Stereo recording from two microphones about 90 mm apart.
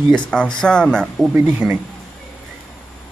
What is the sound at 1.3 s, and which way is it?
Speech, 20° right (ahead or behind).